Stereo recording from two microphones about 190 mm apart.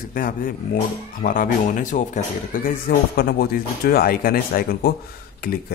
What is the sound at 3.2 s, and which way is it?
Speech, 50° left (ahead or behind).